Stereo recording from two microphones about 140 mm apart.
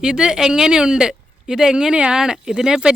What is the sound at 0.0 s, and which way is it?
A woman's voice, 5° right (ahead or behind).